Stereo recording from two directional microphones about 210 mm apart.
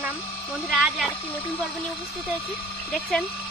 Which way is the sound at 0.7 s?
Centre (ahead or behind).